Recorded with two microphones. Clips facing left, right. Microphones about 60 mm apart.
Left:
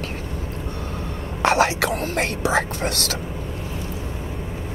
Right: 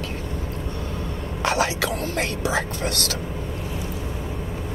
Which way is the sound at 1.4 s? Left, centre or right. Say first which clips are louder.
Left 4 dB; left.